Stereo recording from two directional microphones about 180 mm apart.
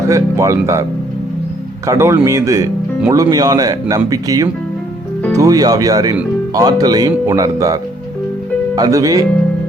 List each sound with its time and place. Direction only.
0.1 s speech: 15° right (ahead or behind)
1.9 s speech: 15° right (ahead or behind)